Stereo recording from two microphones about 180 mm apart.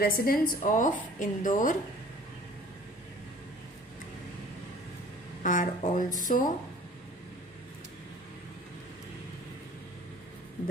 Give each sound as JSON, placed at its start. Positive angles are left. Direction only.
{"t": 0.0, "sound": "a woman's voice", "side_deg": 55}
{"t": 0.6, "sound": "a woman's voice", "side_deg": 45}
{"t": 5.4, "sound": "speech", "side_deg": 45}